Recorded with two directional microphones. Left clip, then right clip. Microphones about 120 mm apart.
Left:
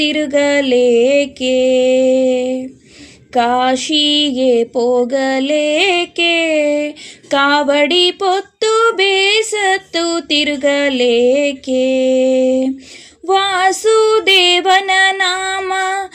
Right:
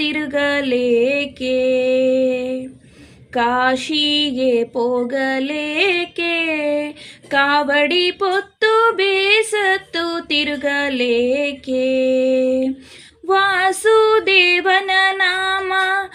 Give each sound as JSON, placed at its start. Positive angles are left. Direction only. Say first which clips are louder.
{"t": 0.0, "sound": "mantra", "louder": "left 5 dB", "side_deg": 25}